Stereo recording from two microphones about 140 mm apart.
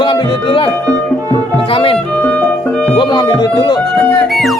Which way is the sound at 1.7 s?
40° left (ahead or behind).